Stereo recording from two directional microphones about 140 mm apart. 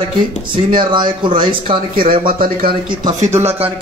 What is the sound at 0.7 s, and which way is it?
Speech, 35° right (ahead or behind).